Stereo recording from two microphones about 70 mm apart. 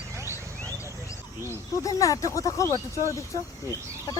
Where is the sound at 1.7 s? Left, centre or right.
Left.